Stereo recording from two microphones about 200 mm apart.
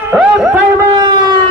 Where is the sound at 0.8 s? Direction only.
20° right (ahead or behind).